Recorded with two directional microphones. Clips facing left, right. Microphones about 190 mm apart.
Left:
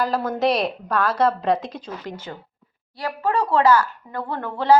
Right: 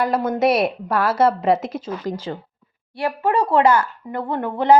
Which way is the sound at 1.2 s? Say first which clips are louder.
Right 4 dB; 20° right (ahead or behind).